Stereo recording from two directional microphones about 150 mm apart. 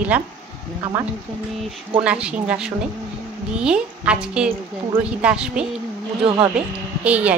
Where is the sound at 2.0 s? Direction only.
5° right (ahead or behind).